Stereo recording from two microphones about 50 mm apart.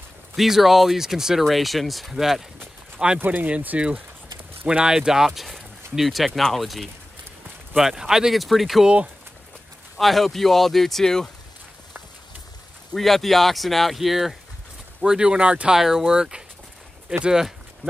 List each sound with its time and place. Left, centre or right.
0.4 s speech: centre
3.2 s speech: right
4.6 s speech: centre
7.7 s speech: centre
9.9 s speech: centre
12.9 s speech: centre
15.0 s speech: centre